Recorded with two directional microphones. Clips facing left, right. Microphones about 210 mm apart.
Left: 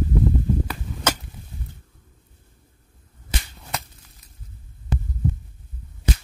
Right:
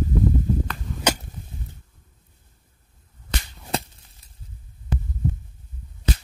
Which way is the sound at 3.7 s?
30° right (ahead or behind).